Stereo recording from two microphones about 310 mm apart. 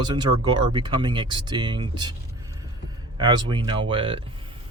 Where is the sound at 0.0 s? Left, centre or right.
Centre.